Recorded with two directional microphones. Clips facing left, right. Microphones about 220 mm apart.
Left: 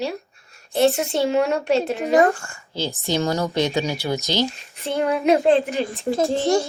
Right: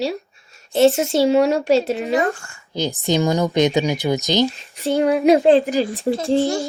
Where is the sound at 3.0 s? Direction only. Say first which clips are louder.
Right 4 dB; 15° right (ahead or behind).